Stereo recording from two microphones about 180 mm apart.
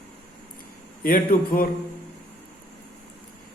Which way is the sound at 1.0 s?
55° left (ahead or behind).